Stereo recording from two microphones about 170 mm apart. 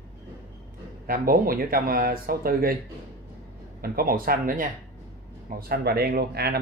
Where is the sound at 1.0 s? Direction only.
60° right (ahead or behind).